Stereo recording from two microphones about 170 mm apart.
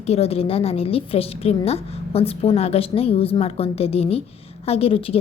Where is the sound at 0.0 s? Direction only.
40° left (ahead or behind).